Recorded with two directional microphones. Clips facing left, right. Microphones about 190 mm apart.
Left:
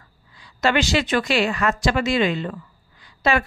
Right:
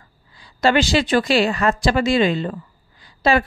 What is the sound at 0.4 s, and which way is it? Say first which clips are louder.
A woman's voice: right 3 dB; 30° right (ahead or behind).